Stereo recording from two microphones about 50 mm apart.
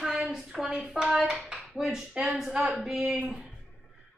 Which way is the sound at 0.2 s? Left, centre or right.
Centre.